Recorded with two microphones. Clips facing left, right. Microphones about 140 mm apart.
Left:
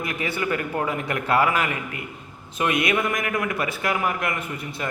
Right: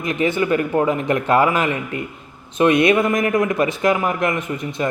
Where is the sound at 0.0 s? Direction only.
25° right (ahead or behind).